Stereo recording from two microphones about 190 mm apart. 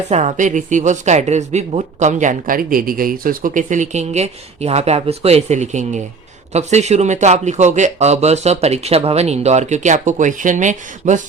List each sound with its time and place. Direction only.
0.1 s speech: 35° right (ahead or behind)